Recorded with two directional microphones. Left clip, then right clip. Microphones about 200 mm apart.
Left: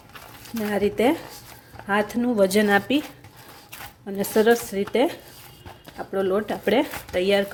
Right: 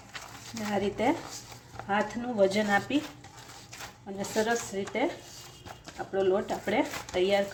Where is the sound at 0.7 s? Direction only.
55° left (ahead or behind).